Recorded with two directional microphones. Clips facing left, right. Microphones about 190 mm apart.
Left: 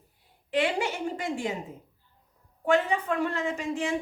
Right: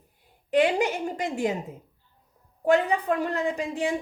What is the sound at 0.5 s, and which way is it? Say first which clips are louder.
Speech: right 5 dB; 40° right (ahead or behind).